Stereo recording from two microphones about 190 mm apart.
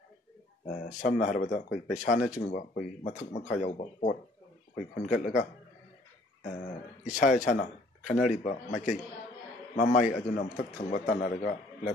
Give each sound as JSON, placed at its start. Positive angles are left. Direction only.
{"t": 0.7, "sound": "speech", "side_deg": 40}
{"t": 7.1, "sound": "speech", "side_deg": 40}